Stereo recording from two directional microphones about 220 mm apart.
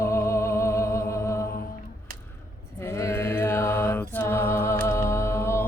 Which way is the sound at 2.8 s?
10° left (ahead or behind).